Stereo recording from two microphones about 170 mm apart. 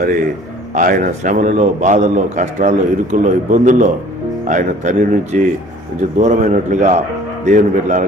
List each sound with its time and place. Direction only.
0.7 s a man's voice: 55° right (ahead or behind)